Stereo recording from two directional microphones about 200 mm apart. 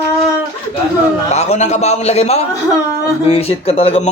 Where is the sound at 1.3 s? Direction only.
35° left (ahead or behind).